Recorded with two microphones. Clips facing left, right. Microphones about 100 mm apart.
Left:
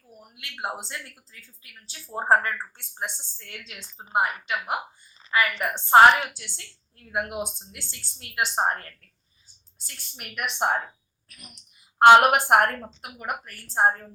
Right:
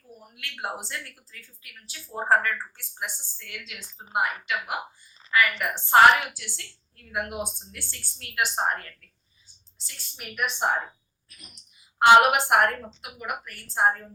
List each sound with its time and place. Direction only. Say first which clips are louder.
0.3 s a woman's voice: left 1 dB; 20° left (ahead or behind)
9.7 s a woman's voice: even; 55° left (ahead or behind)
11.9 s a woman's voice: left 2 dB; 50° left (ahead or behind)